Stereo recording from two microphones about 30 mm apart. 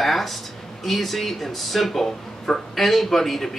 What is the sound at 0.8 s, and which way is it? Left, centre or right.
A man's voice, centre.